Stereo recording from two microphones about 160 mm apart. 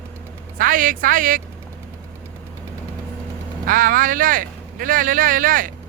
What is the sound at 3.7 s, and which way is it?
Speech, 55° right (ahead or behind).